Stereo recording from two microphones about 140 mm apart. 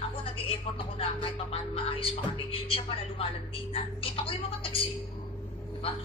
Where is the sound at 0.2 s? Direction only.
40° left (ahead or behind).